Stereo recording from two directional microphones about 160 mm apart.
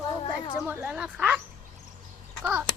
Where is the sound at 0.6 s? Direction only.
10° right (ahead or behind).